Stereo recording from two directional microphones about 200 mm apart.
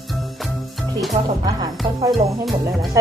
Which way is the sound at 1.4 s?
20° right (ahead or behind).